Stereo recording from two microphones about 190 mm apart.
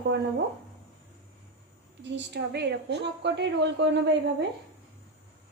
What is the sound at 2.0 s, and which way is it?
A woman's voice, 65° right (ahead or behind).